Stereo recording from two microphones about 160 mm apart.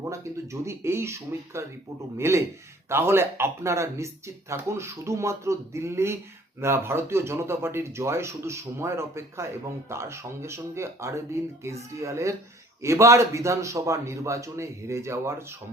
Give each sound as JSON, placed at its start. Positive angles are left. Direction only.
{"t": 0.0, "sound": "a man's voice", "side_deg": -20}